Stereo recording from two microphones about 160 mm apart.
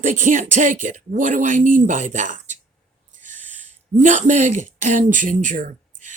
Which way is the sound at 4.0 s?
50° right (ahead or behind).